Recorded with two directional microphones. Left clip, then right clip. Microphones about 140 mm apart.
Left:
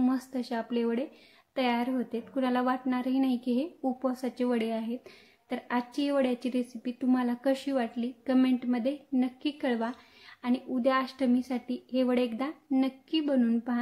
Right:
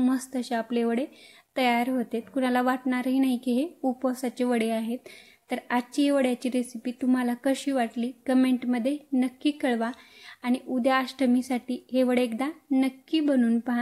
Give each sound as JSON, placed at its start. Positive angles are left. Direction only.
{"t": 0.0, "sound": "a woman's voice", "side_deg": -30}